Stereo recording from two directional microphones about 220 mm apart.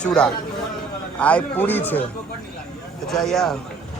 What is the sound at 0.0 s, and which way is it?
Speech, 5° left (ahead or behind).